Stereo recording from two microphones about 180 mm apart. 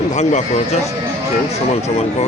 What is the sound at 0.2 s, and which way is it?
Speech, 40° left (ahead or behind).